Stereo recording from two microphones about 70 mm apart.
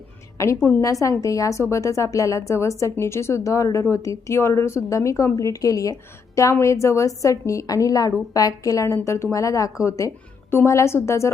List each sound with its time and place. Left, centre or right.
0.3 s a woman's voice: left
9.0 s speech: left
9.3 s a woman's voice: left